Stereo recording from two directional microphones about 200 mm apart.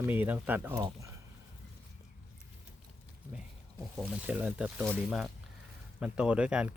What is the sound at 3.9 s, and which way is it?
Speech, 5° right (ahead or behind).